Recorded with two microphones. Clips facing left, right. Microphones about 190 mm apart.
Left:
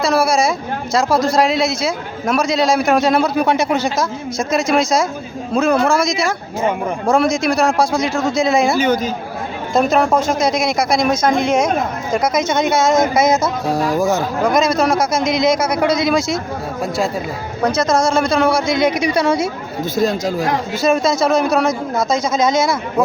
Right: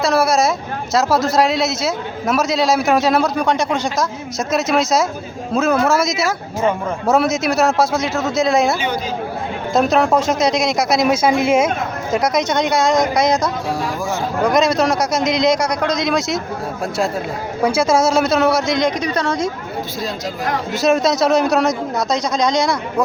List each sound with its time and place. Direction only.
0.0 s a man's voice: centre (ahead or behind)
13.7 s speech: 40° left (ahead or behind)
14.4 s a man's voice: centre (ahead or behind)
17.6 s a man's voice: 10° right (ahead or behind); by 19.5 s 10° left (ahead or behind)
20.0 s speech: 50° left (ahead or behind)
20.7 s a man's voice: centre (ahead or behind)